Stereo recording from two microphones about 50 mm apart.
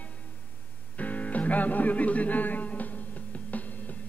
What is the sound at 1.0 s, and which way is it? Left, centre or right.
Speech, left.